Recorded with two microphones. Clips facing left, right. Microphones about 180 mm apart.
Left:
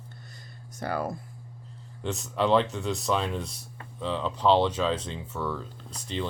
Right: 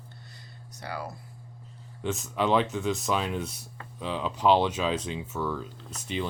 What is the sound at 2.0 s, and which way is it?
Speech, centre (ahead or behind).